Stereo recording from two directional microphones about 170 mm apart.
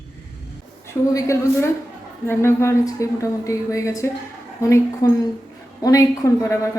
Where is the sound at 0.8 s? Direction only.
15° left (ahead or behind).